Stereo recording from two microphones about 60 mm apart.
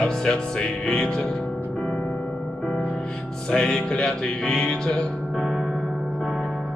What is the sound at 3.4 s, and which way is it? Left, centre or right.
Music, centre.